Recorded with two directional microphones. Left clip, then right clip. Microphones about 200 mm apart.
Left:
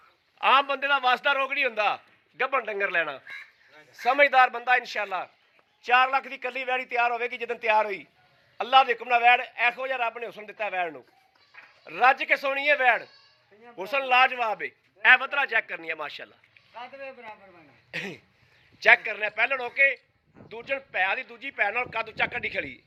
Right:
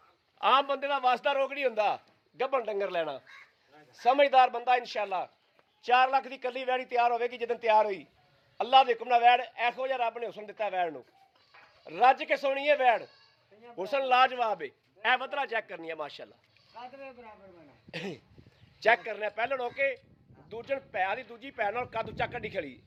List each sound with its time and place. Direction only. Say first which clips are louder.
0.3 s a man's voice: left 4 dB; 10° right (ahead or behind)
16.7 s speech: left 5 dB; 5° left (ahead or behind)
17.9 s a man's voice: left 5 dB; 20° right (ahead or behind)